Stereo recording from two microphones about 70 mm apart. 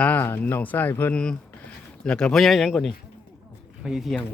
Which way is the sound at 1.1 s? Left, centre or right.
Centre.